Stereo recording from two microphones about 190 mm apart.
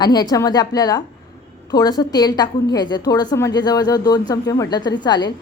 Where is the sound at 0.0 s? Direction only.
20° left (ahead or behind).